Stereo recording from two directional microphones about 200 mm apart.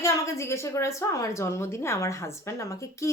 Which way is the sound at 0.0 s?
15° left (ahead or behind).